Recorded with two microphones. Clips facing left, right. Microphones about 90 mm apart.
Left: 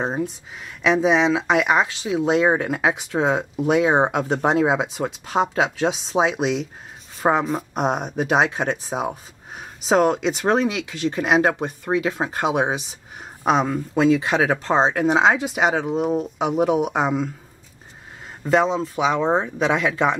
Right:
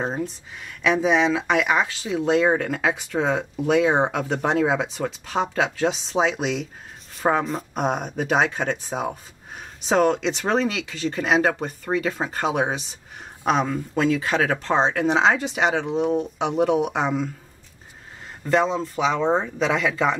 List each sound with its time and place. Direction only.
0.0 s speech: 5° left (ahead or behind)
18.4 s speech: 10° left (ahead or behind)